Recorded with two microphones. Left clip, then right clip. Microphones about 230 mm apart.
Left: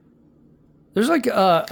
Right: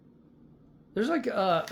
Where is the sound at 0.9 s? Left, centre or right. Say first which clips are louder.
Left 9 dB; left.